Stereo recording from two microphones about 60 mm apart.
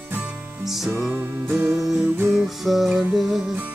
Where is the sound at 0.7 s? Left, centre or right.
Centre.